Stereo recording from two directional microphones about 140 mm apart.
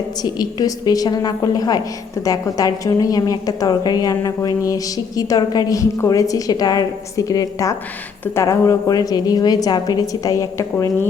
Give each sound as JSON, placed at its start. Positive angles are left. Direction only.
{"t": 0.2, "sound": "a woman's voice", "side_deg": 30}